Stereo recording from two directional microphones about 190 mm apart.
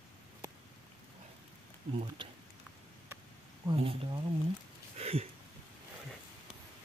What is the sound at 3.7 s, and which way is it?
Speech, 30° right (ahead or behind).